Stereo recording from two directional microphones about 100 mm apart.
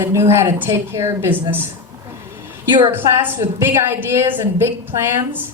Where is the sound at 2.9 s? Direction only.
20° right (ahead or behind).